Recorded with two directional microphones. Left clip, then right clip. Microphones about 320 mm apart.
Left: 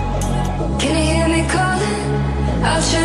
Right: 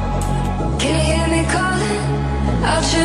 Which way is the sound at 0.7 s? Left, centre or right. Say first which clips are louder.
Left 1 dB; centre.